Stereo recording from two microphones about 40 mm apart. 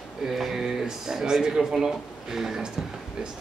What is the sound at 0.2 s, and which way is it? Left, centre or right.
A woman's voice, centre.